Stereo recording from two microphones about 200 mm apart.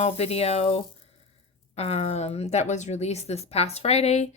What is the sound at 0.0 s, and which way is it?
A woman's voice, 30° left (ahead or behind).